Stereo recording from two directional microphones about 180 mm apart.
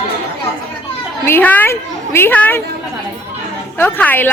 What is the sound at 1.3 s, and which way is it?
A woman's voice, 10° left (ahead or behind).